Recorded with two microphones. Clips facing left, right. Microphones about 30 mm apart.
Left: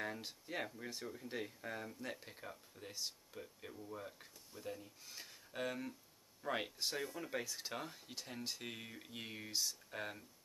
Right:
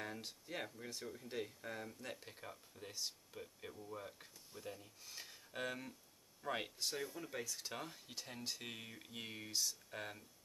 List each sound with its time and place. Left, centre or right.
0.0 s speech: centre
6.8 s speech: centre
7.7 s speech: centre